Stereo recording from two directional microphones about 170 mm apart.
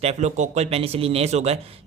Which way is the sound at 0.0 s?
40° right (ahead or behind).